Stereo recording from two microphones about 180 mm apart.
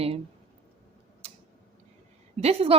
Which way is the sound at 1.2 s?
35° right (ahead or behind).